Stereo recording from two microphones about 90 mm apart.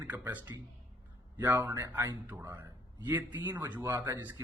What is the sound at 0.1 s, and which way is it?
Speech, 20° right (ahead or behind).